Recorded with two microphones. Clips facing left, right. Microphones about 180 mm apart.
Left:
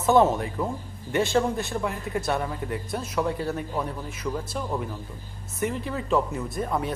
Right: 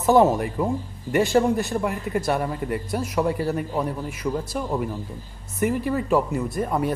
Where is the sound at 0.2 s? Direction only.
10° right (ahead or behind).